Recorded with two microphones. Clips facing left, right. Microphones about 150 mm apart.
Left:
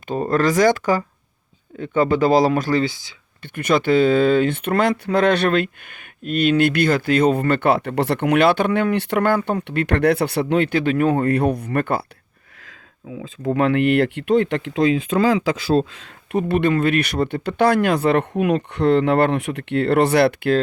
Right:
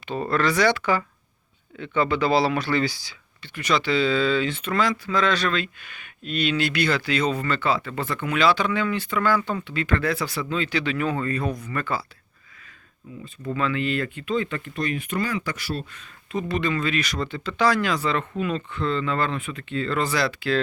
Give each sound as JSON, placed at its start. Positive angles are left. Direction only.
{"t": 0.1, "sound": "speech", "side_deg": 45}
{"t": 2.8, "sound": "speech", "side_deg": 20}
{"t": 3.4, "sound": "speech", "side_deg": 55}
{"t": 12.6, "sound": "a sound", "side_deg": 90}
{"t": 13.5, "sound": "speech", "side_deg": 60}